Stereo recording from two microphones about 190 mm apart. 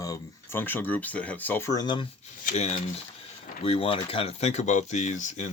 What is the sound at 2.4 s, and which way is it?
Speech, 35° left (ahead or behind).